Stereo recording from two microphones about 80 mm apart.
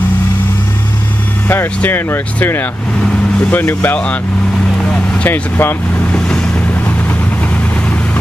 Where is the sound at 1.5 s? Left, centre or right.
Left.